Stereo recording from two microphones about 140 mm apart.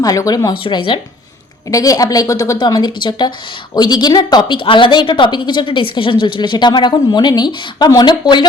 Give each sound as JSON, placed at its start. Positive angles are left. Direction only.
{"t": 0.0, "sound": "a woman's voice", "side_deg": 25}
{"t": 0.6, "sound": "a woman's voice", "side_deg": 40}
{"t": 1.7, "sound": "a woman's voice", "side_deg": 25}